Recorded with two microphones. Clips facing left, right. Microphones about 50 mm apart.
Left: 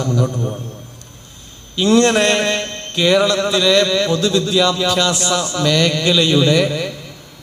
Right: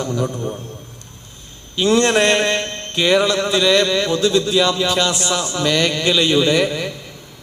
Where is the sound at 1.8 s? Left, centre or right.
Centre.